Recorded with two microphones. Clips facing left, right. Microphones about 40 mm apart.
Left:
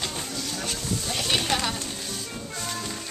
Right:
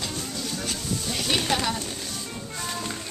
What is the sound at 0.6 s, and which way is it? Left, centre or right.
Speech, centre.